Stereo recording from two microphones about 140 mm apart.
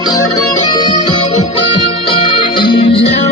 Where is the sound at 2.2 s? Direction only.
35° left (ahead or behind).